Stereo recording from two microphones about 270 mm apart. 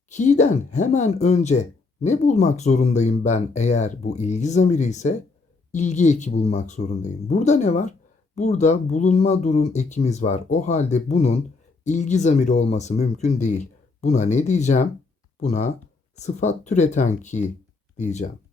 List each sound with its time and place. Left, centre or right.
0.1 s speech: left